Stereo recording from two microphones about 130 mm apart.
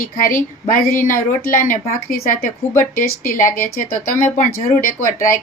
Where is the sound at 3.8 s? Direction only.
85° left.